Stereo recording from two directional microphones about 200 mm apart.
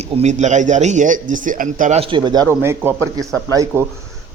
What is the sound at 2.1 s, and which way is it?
Speech, 20° right (ahead or behind).